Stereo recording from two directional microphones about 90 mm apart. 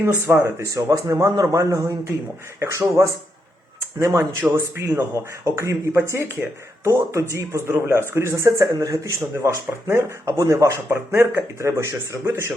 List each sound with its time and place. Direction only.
0.0 s speech: 25° right (ahead or behind)